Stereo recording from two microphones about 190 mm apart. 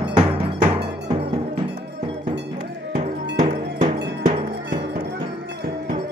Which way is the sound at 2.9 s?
40° right (ahead or behind).